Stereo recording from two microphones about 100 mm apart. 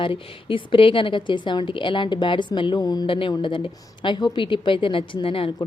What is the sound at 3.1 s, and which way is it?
A woman's voice, 60° left (ahead or behind).